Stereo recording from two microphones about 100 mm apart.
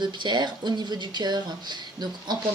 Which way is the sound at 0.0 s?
50° right (ahead or behind).